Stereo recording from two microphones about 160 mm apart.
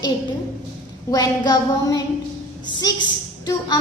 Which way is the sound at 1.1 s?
25° left (ahead or behind).